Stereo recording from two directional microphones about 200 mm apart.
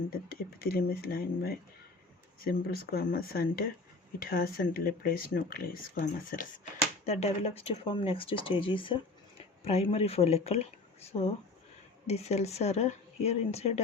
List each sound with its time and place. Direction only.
0.6 s speech: 50° left (ahead or behind)
7.0 s speech: 35° left (ahead or behind)
12.0 s speech: 30° left (ahead or behind)